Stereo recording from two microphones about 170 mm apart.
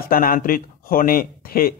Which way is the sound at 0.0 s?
60° left (ahead or behind).